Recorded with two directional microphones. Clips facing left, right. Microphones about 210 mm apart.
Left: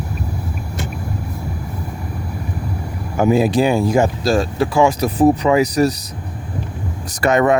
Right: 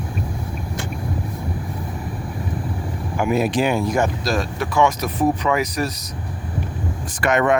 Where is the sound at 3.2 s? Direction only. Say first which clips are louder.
Left 5 dB; 35° left (ahead or behind).